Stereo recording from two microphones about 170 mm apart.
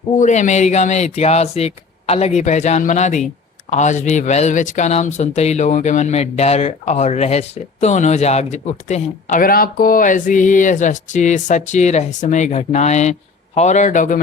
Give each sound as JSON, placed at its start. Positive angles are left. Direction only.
{"t": 0.2, "sound": "speech", "side_deg": 45}